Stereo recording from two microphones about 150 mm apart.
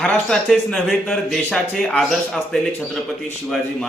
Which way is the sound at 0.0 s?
5° left (ahead or behind).